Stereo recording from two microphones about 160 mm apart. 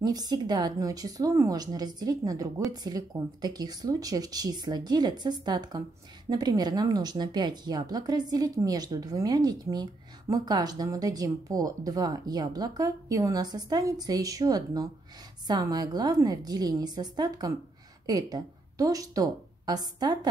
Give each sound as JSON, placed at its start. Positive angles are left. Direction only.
{"t": 0.0, "sound": "a woman's voice", "side_deg": -25}